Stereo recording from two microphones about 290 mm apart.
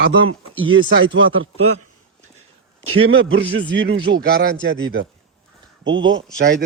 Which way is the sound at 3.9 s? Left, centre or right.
Centre.